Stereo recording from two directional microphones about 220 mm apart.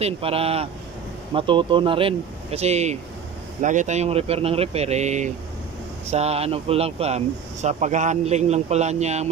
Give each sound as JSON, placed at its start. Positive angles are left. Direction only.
{"t": 0.0, "sound": "speech", "side_deg": -25}